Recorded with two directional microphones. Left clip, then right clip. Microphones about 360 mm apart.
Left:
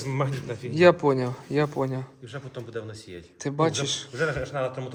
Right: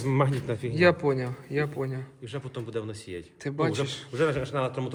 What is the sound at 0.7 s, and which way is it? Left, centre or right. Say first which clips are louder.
Speech: left 4 dB; centre.